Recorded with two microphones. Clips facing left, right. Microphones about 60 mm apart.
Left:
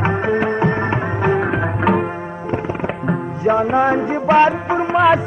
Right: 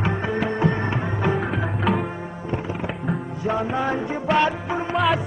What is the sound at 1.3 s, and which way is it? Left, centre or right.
Music, left.